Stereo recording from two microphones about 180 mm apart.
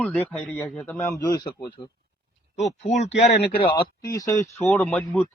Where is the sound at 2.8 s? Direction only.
40° left (ahead or behind).